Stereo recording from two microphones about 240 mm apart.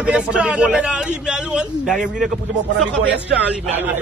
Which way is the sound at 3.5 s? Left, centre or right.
Centre.